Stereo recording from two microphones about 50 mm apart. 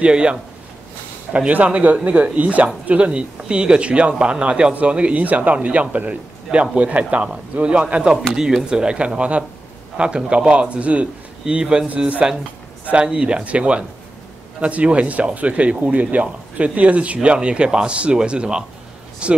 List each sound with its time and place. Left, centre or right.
0.0 s speech: right
8.4 s speech: centre